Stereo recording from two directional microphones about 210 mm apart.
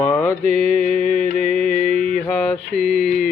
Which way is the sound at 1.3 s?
40° left (ahead or behind).